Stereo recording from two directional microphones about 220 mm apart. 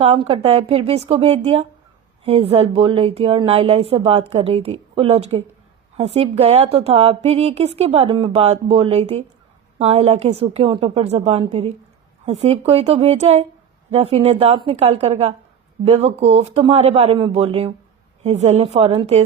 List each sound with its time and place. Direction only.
0.0 s speech: 25° right (ahead or behind)